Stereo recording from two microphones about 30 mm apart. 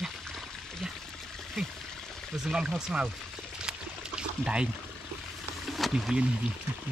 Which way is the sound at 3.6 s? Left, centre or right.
Right.